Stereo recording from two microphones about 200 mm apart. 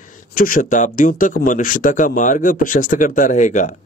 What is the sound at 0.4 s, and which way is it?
Speech, 45° left (ahead or behind).